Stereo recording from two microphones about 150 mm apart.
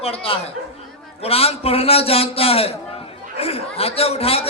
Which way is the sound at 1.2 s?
40° left (ahead or behind).